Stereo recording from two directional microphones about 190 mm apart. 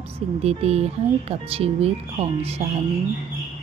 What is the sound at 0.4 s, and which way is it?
Speech, 35° right (ahead or behind).